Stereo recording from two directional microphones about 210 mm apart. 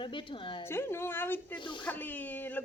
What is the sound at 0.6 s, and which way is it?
Speech, 10° left (ahead or behind).